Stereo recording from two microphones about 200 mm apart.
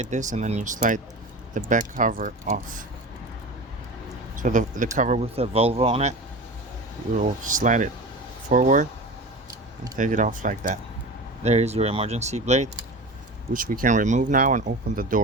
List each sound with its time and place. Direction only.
0.0 s speech: 35° right (ahead or behind)
4.4 s speech: 40° right (ahead or behind)
7.2 s speech: 40° right (ahead or behind)
9.5 s a sound: 20° right (ahead or behind)
10.0 s speech: 40° right (ahead or behind)